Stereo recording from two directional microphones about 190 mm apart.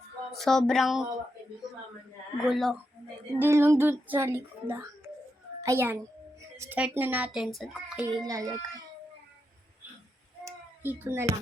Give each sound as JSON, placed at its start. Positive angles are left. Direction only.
{"t": 0.3, "sound": "speech", "side_deg": 0}
{"t": 2.4, "sound": "speech", "side_deg": 0}
{"t": 3.3, "sound": "speech", "side_deg": -10}
{"t": 8.1, "sound": "speech", "side_deg": -20}
{"t": 10.4, "sound": "a sound", "side_deg": -10}